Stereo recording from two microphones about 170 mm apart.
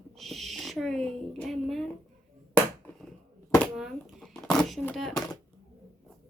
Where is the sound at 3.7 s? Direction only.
Centre (ahead or behind).